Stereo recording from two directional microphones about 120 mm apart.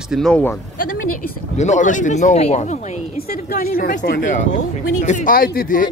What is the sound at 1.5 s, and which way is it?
Speech, 85° left.